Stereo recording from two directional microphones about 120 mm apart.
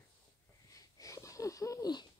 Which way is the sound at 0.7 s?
30° left (ahead or behind).